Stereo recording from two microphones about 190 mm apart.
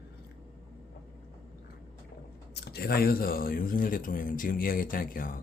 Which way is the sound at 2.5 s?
55° left (ahead or behind).